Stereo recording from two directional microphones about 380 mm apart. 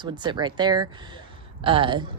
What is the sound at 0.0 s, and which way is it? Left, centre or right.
Speech, centre.